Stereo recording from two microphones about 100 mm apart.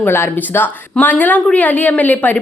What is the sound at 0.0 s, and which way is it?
A woman's voice, 25° left (ahead or behind).